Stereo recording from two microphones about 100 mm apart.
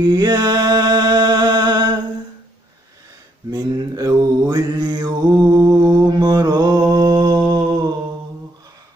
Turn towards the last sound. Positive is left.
turn(degrees=-45)  # may be behind; listen again after turning